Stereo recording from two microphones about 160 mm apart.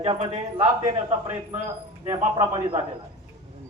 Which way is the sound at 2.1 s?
25° right (ahead or behind).